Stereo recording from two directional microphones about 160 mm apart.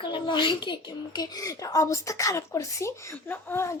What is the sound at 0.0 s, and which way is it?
A woman's voice, 30° left (ahead or behind).